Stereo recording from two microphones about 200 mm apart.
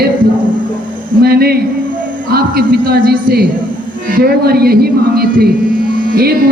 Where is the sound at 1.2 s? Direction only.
50° right (ahead or behind).